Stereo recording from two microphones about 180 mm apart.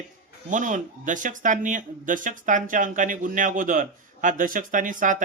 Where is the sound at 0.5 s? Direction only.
45° right (ahead or behind).